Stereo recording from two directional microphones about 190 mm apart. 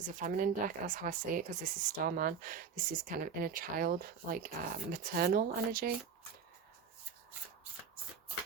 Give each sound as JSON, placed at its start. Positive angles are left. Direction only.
{"t": 0.0, "sound": "speech", "side_deg": -45}